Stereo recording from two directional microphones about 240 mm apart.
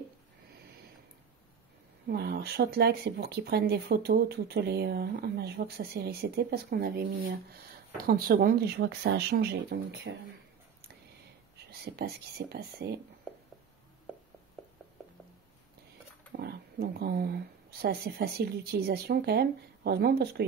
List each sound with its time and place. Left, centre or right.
2.0 s speech: right
11.5 s speech: right
16.3 s speech: right